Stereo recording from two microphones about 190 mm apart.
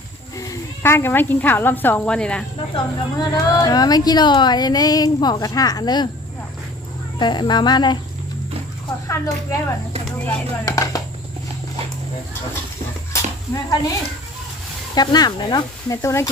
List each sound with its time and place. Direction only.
0.3 s a woman's voice: 20° left (ahead or behind)
2.7 s speech: 20° left (ahead or behind)
7.2 s speech: 25° left (ahead or behind)
9.0 s speech: 15° left (ahead or behind)
13.1 s dishes: 20° left (ahead or behind)
14.9 s speech: 20° left (ahead or behind)